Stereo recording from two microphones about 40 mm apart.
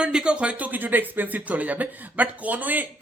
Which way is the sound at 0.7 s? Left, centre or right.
Right.